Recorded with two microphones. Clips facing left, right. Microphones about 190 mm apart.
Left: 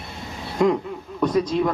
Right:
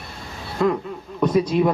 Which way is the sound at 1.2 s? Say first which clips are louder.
Right 2 dB; 5° right (ahead or behind).